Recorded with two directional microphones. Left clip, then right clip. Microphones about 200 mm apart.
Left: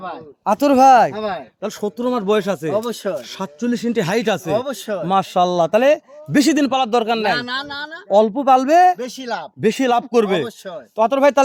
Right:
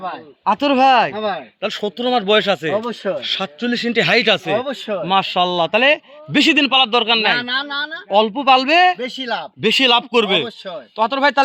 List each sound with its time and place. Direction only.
0.4 s speech: 65° left (ahead or behind)
1.1 s speech: 10° right (ahead or behind)
1.6 s speech: 55° left (ahead or behind)
2.9 s speech: 10° right (ahead or behind)
3.2 s speech: 55° left (ahead or behind)
4.6 s speech: 10° left (ahead or behind)
5.0 s speech: 55° left (ahead or behind)
7.3 s a woman's voice: 25° left (ahead or behind)
8.2 s speech: 50° left (ahead or behind)
9.0 s a woman's voice: 20° left (ahead or behind)
10.1 s speech: 55° left (ahead or behind)